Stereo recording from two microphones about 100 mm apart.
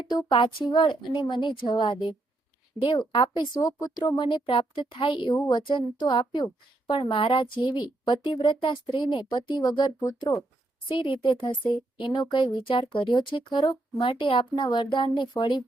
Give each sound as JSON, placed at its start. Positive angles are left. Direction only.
{"t": 0.1, "sound": "speech", "side_deg": 45}
{"t": 0.3, "sound": "speech", "side_deg": 60}
{"t": 4.2, "sound": "speech", "side_deg": 60}
{"t": 10.0, "sound": "speech", "side_deg": 35}
{"t": 10.8, "sound": "speech", "side_deg": 55}